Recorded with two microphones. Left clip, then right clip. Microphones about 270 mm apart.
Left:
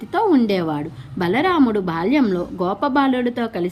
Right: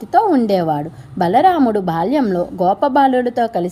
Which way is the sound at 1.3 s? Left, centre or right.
Right.